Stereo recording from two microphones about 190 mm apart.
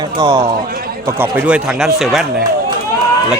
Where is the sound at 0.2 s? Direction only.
20° right (ahead or behind); by 1.9 s 5° right (ahead or behind).